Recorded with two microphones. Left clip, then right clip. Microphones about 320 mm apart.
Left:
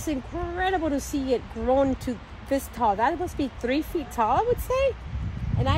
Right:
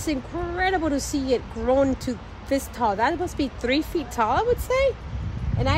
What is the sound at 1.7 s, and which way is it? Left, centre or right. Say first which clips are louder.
Speech: right 2 dB; centre.